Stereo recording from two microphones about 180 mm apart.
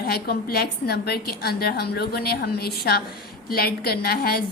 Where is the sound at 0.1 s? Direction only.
60° left (ahead or behind).